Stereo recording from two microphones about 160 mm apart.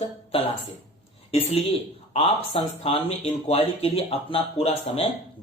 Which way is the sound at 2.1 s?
35° left (ahead or behind).